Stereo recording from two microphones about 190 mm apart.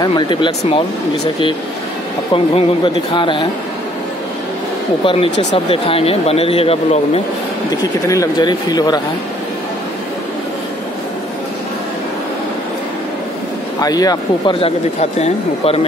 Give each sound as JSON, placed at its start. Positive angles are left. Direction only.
{"t": 0.0, "sound": "speech", "side_deg": 25}
{"t": 5.0, "sound": "speech", "side_deg": 30}
{"t": 7.7, "sound": "speech", "side_deg": 20}
{"t": 13.7, "sound": "speech", "side_deg": 20}